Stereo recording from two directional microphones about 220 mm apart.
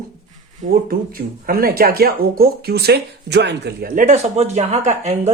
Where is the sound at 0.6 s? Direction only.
40° right (ahead or behind).